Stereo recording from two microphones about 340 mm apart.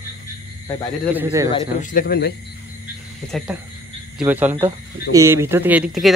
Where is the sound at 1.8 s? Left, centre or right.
Left.